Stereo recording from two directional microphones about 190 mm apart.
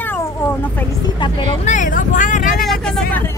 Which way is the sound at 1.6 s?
40° left (ahead or behind).